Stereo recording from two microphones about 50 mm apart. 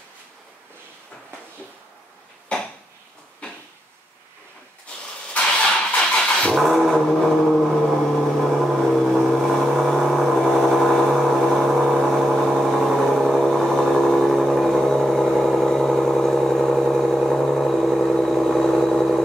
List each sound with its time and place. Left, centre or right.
3.4 s a sound: left
5.4 s vehicle: centre
6.5 s gong: centre
11.8 s vehicle: centre